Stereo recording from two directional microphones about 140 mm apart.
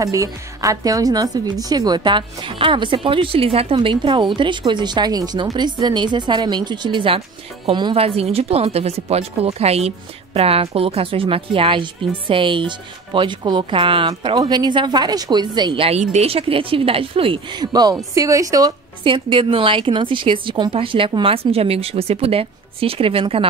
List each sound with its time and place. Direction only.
0.0 s a woman's voice: 25° right (ahead or behind); by 16.0 s 40° right (ahead or behind)
16.0 s a woman's voice: 50° right (ahead or behind); by 18.7 s 25° right (ahead or behind)
19.0 s a woman's voice: 35° right (ahead or behind)